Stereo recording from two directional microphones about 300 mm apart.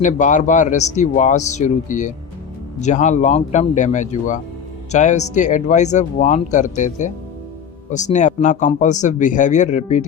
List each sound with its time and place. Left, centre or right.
0.0 s speech: left